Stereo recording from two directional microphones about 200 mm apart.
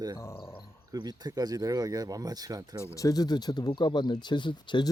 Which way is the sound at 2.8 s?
15° left (ahead or behind).